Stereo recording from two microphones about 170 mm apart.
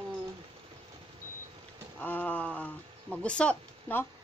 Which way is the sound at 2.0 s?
10° left (ahead or behind).